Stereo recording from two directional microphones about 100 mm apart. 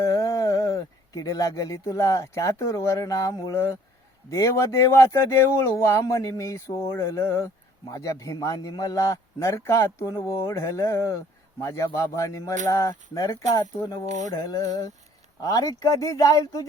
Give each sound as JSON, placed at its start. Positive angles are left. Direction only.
{"t": 0.0, "sound": "a man's voice", "side_deg": 35}